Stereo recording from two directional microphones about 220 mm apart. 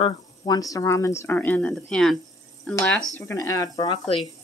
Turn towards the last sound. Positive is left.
turn(degrees=20)  # may be behind; listen again after turning